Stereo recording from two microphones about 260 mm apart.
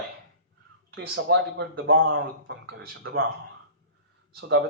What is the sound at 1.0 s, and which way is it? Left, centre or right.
Speech, right.